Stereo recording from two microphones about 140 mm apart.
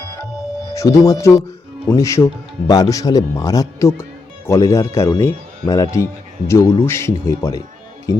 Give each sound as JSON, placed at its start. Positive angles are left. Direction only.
{"t": 0.7, "sound": "speech", "side_deg": 20}